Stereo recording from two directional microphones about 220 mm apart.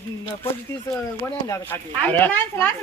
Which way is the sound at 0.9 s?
10° left (ahead or behind).